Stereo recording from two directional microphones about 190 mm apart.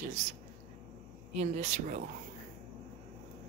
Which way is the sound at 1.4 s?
40° right (ahead or behind).